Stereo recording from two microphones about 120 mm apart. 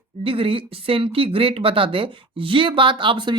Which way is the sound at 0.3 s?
50° right (ahead or behind).